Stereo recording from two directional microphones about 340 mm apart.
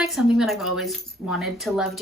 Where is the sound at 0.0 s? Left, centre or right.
Centre.